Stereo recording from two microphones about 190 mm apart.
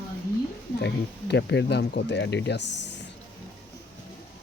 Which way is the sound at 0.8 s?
65° left (ahead or behind).